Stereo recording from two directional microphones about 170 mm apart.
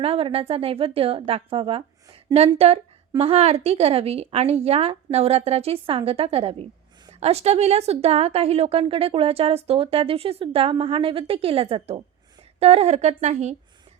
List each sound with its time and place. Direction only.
0.0 s a woman's voice: 35° right (ahead or behind)